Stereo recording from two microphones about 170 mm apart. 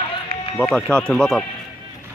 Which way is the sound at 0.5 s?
10° left (ahead or behind).